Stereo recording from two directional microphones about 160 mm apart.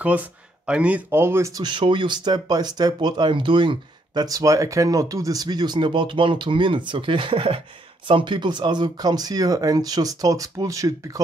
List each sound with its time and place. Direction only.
0.0 s speech: 10° right (ahead or behind)